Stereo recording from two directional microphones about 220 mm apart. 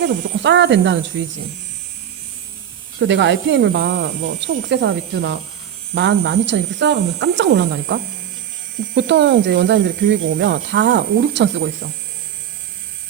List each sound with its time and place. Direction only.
0.0 s speech: 55° right (ahead or behind)
3.0 s speech: 55° right (ahead or behind)
9.0 s speech: 55° right (ahead or behind)